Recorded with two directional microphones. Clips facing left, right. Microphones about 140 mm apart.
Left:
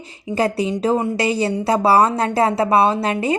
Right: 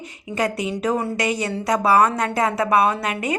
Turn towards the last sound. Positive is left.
turn(degrees=30)  # may be behind; listen again after turning